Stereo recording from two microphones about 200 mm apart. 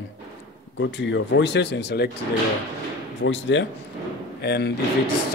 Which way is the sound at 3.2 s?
65° left (ahead or behind).